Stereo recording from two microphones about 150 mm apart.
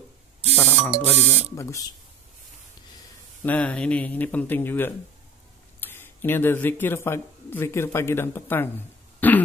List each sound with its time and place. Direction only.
0.6 s buzzer: 15° left (ahead or behind)
1.5 s speech: 20° left (ahead or behind)
3.4 s speech: 10° left (ahead or behind)
9.2 s throat clearing: 10° left (ahead or behind)